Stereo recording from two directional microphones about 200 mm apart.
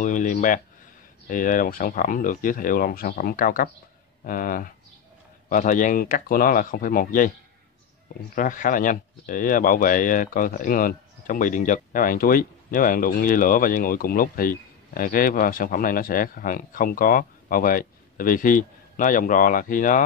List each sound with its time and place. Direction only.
0.0 s speech: 40° left (ahead or behind)
8.4 s speech: 40° left (ahead or behind)